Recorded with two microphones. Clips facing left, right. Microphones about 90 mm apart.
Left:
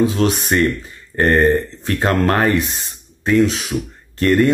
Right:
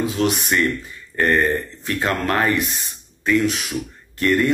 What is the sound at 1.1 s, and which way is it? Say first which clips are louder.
Speech: left 4 dB; 50° left (ahead or behind).